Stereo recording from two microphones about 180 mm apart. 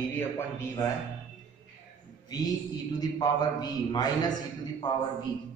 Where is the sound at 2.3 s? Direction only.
20° left (ahead or behind).